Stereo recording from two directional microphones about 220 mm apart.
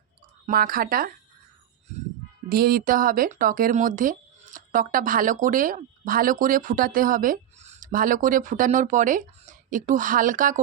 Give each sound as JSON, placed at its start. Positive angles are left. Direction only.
{"t": 0.4, "sound": "speech", "side_deg": -40}
{"t": 2.5, "sound": "speech", "side_deg": -40}